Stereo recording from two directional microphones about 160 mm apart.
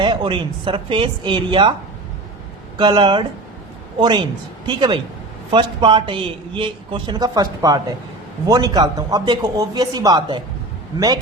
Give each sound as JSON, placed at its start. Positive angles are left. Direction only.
{"t": 0.0, "sound": "a woman's voice", "side_deg": -30}
{"t": 2.7, "sound": "a man's voice", "side_deg": -30}